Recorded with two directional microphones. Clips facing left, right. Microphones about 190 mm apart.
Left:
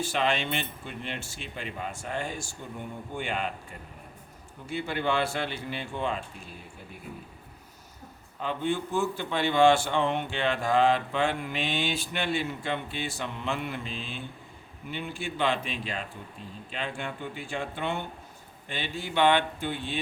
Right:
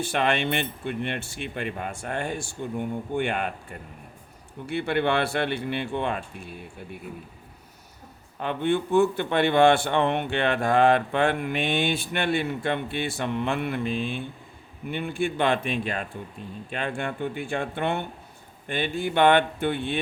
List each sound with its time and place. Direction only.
0.0 s a man's voice: 60° right (ahead or behind)
4.6 s a man's voice: 65° right (ahead or behind)
8.4 s a man's voice: 60° right (ahead or behind)